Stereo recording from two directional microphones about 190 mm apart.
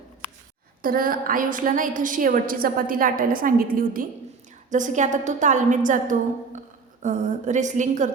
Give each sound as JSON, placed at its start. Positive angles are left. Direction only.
{"t": 0.8, "sound": "a woman's voice", "side_deg": -50}